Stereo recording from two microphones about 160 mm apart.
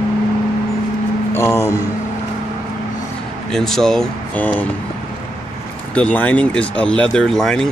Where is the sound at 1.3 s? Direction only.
15° left (ahead or behind).